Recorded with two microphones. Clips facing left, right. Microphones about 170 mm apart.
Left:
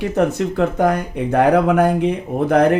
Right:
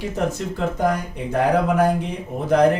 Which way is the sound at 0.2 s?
65° left (ahead or behind).